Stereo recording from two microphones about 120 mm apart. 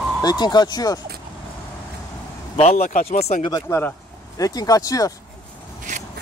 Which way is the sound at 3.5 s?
25° left (ahead or behind).